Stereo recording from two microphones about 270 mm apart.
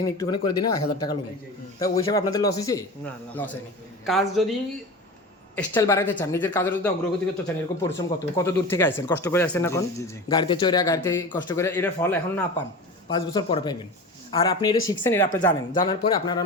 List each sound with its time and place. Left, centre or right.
0.0 s a woman's voice: centre
5.5 s speech: centre